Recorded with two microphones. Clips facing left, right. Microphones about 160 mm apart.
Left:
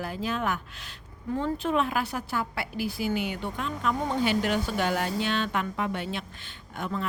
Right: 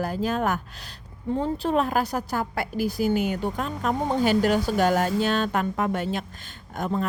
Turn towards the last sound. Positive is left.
turn(degrees=-40)  # may be behind; listen again after turning